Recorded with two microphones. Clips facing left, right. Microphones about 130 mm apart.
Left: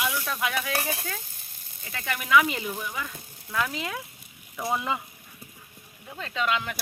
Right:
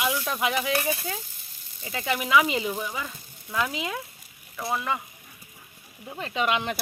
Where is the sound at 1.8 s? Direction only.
20° right (ahead or behind).